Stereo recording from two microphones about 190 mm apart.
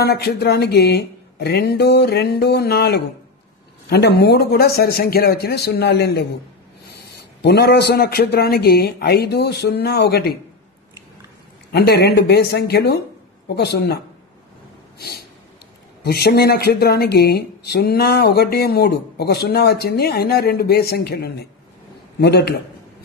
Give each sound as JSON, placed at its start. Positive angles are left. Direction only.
{"t": 0.0, "sound": "speech", "side_deg": 55}
{"t": 7.4, "sound": "speech", "side_deg": 60}
{"t": 11.7, "sound": "speech", "side_deg": 55}
{"t": 15.0, "sound": "a sound", "side_deg": 55}
{"t": 16.0, "sound": "speech", "side_deg": 55}